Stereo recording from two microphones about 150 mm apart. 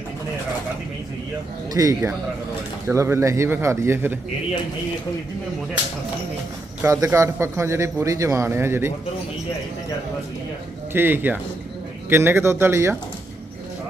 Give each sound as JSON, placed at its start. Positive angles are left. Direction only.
{"t": 1.7, "sound": "a man's voice", "side_deg": -25}
{"t": 6.8, "sound": "a man's voice", "side_deg": -20}
{"t": 10.9, "sound": "speech", "side_deg": -15}